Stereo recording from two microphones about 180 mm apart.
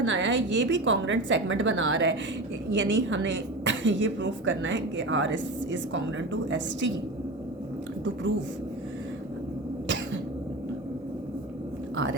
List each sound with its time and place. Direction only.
0.0 s a woman's voice: 90° right